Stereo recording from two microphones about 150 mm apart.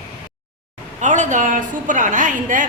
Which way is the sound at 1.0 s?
55° right (ahead or behind).